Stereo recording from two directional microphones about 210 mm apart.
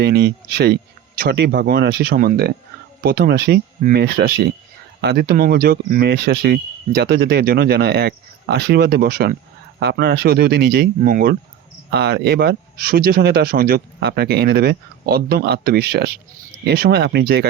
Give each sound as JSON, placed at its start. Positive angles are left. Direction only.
{"t": 0.0, "sound": "speech", "side_deg": -50}